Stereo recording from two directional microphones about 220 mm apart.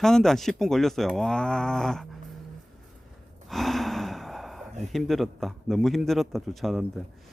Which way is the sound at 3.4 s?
Centre (ahead or behind).